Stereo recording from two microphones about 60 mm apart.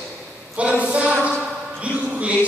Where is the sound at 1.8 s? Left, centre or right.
Right.